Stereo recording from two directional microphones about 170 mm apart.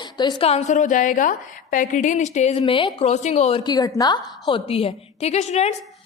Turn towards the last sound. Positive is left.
turn(degrees=40)  # may be behind; listen again after turning